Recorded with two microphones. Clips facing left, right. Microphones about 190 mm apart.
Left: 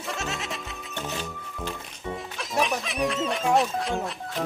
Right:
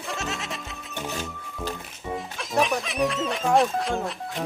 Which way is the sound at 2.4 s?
Centre (ahead or behind).